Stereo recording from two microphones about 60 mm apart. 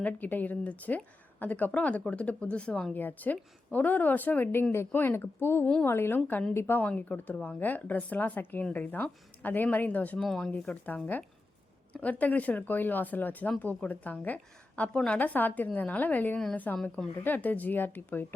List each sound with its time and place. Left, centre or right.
0.0 s a woman's voice: left
2.9 s a woman's voice: left
6.8 s a woman's voice: centre
10.2 s speech: centre
10.5 s a woman's voice: left
15.2 s a woman's voice: left